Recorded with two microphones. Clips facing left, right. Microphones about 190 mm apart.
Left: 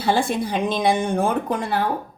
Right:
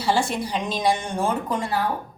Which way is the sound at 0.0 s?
55° left (ahead or behind).